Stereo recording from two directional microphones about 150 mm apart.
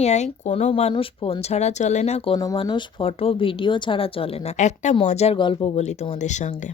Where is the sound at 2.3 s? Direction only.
25° left (ahead or behind).